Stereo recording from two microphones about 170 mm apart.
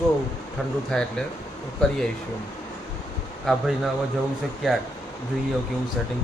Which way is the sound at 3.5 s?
Centre (ahead or behind).